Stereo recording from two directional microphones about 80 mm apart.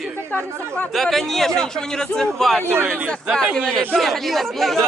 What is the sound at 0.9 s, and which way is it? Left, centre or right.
A man's voice, centre.